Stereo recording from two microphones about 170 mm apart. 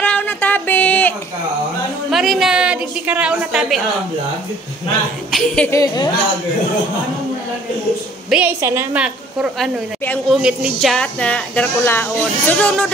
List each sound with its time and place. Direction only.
0.0 s a sound: 10° left (ahead or behind)
2.0 s a woman's voice: centre (ahead or behind)
5.3 s a woman's voice: 5° left (ahead or behind)
5.7 s a woman's voice: 20° left (ahead or behind)
8.3 s a woman's voice: 10° right (ahead or behind); by 12.8 s 5° left (ahead or behind)